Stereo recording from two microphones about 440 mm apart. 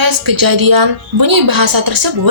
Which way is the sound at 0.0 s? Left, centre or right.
Right.